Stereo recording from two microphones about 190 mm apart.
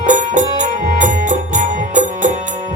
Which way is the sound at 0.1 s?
40° right (ahead or behind).